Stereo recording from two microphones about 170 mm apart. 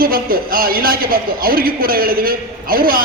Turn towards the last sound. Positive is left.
turn(degrees=-60)  # may be behind; listen again after turning